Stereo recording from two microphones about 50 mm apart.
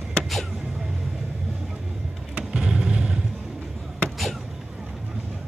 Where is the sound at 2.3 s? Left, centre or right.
Centre.